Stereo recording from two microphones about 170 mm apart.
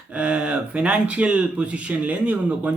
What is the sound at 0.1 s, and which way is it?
Speech, 5° right (ahead or behind).